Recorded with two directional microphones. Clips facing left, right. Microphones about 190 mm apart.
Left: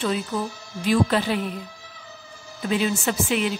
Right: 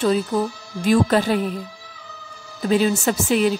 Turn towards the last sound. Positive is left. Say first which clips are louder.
# right 5 dB
turn(degrees=-40)  # may be behind; listen again after turning